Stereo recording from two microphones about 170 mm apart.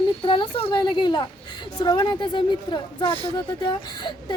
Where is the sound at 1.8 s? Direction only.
25° left (ahead or behind).